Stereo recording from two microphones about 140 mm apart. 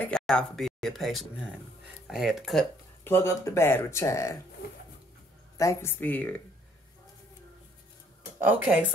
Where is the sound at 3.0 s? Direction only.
20° left (ahead or behind).